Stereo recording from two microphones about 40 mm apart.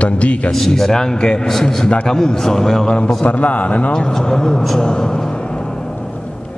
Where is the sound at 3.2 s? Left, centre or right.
Left.